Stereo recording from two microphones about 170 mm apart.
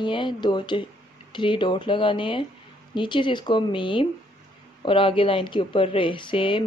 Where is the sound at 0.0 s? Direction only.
30° left (ahead or behind).